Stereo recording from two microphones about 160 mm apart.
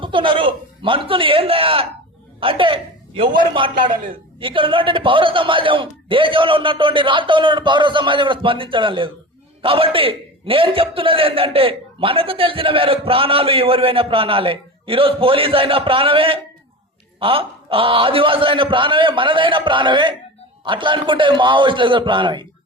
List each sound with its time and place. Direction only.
0.0 s a man's voice: 30° right (ahead or behind)